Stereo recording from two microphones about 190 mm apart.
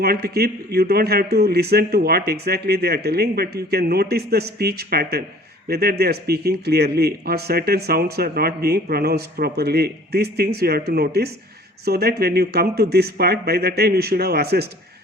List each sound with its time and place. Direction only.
0.0 s speech: 55° right (ahead or behind)